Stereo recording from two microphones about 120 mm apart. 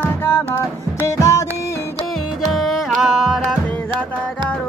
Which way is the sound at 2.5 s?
5° right (ahead or behind).